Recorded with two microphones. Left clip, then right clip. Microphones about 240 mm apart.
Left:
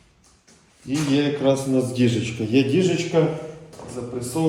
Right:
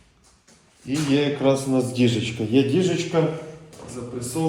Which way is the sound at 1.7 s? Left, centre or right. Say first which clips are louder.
Even; centre.